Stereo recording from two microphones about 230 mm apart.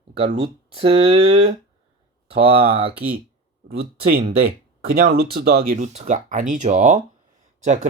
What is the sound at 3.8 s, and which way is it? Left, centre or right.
Speech, right.